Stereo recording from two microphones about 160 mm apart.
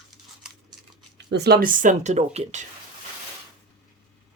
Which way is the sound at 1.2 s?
90° right.